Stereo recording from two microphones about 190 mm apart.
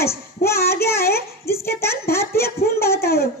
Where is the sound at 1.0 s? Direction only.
55° left (ahead or behind).